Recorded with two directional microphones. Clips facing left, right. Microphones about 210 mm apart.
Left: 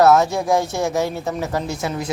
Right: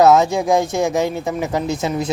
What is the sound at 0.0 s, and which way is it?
Speech, 20° right (ahead or behind).